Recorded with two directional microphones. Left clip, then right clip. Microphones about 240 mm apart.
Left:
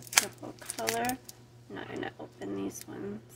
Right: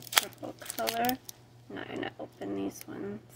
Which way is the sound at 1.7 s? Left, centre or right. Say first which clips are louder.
Right 1 dB; centre.